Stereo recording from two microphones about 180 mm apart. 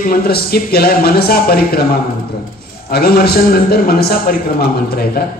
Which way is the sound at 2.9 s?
55° left (ahead or behind).